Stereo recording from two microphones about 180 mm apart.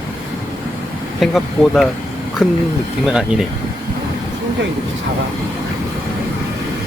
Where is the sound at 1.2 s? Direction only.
Centre (ahead or behind).